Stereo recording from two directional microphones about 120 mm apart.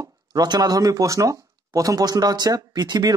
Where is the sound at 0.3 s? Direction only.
35° right (ahead or behind).